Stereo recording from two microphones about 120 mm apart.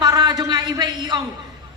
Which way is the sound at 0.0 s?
35° right (ahead or behind).